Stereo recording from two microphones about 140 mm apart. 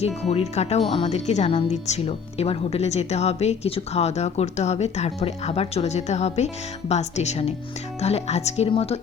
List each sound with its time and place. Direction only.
0.0 s speech: 50° left (ahead or behind)